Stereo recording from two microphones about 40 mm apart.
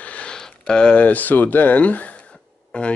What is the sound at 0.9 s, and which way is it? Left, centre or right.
Speech, left.